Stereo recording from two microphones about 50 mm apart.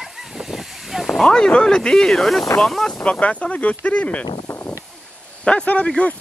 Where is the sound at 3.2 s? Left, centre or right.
Left.